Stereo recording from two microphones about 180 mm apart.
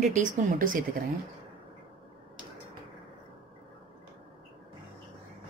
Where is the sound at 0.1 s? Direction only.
45° right (ahead or behind).